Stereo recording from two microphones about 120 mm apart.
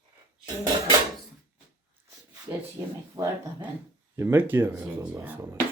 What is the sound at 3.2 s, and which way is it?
Speech, 25° right (ahead or behind).